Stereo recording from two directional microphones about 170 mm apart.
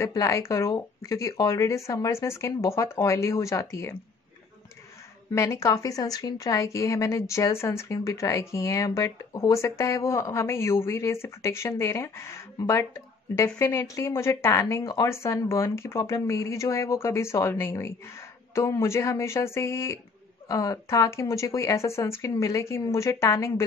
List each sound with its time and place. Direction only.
0.0 s a woman's voice: 20° left (ahead or behind)
5.3 s a woman's voice: 20° left (ahead or behind)